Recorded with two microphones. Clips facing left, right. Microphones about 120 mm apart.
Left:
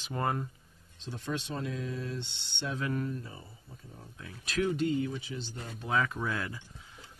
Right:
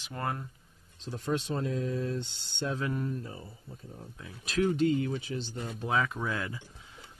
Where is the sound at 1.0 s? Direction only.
35° right (ahead or behind).